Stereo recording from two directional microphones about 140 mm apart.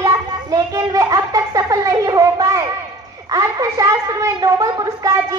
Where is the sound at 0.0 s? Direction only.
25° right (ahead or behind).